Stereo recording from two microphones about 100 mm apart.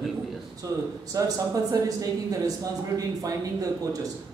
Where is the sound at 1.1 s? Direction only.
35° right (ahead or behind).